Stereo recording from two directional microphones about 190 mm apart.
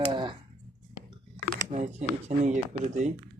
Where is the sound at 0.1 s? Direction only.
25° right (ahead or behind).